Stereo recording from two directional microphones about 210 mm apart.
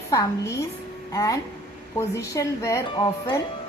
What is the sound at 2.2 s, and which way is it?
A woman's voice, 15° left (ahead or behind).